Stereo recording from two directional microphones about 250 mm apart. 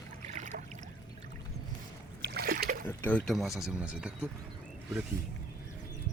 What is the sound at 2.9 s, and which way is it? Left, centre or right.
Speech, centre.